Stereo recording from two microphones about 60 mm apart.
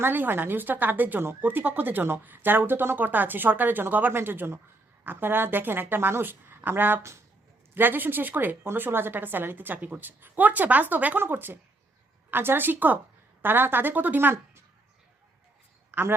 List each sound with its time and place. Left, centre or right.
0.0 s a woman's voice: right
15.9 s a man's voice: right